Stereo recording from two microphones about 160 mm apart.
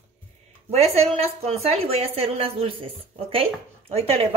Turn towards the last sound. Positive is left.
turn(degrees=-40)  # may be behind; listen again after turning